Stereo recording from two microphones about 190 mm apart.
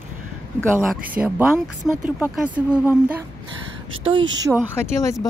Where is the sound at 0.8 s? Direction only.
10° right (ahead or behind).